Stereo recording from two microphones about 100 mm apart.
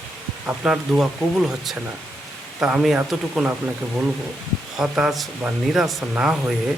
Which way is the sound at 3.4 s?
15° right (ahead or behind).